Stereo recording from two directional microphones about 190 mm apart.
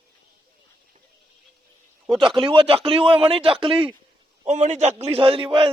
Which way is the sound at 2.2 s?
30° right (ahead or behind).